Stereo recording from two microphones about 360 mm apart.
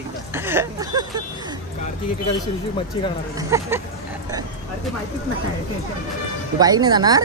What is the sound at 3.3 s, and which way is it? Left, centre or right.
Speech, centre.